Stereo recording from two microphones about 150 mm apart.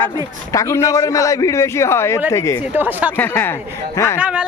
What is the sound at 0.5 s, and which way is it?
A man's voice, 20° left (ahead or behind).